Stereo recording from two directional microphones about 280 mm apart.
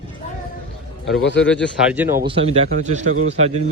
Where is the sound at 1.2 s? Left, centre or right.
Left.